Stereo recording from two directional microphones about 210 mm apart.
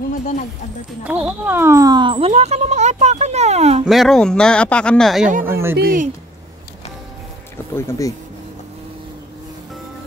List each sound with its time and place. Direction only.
1.0 s speech: 5° right (ahead or behind); by 3.8 s 30° right (ahead or behind)
3.8 s speech: centre (ahead or behind)
5.4 s speech: 10° right (ahead or behind)
5.8 s speech: 45° right (ahead or behind)
7.7 s speech: 10° left (ahead or behind)